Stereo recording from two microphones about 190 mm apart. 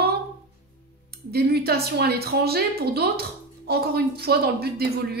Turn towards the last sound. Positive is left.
turn(degrees=-55)  # may be behind; listen again after turning